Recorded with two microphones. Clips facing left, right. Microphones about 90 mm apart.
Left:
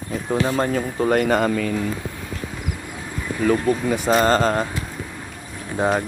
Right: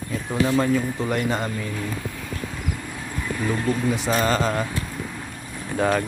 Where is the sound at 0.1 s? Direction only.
35° left (ahead or behind); by 1.7 s 75° left (ahead or behind).